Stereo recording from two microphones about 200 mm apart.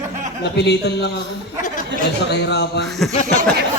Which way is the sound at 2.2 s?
55° left (ahead or behind).